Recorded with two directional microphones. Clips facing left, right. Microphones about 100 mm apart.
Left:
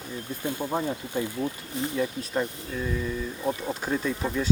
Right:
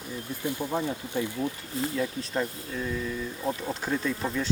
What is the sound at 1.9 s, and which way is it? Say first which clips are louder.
Speech: left 3 dB; 10° left (ahead or behind).